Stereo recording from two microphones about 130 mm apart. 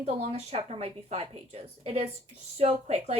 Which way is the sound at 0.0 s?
55° right (ahead or behind).